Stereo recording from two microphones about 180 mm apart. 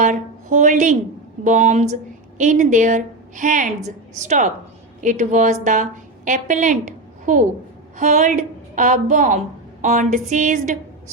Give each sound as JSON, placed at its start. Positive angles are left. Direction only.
{"t": 0.0, "sound": "a woman's voice", "side_deg": -45}